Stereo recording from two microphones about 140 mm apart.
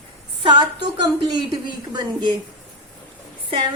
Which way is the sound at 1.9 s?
30° right (ahead or behind).